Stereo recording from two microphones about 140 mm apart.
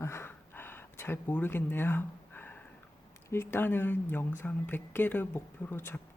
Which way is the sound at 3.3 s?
15° left (ahead or behind).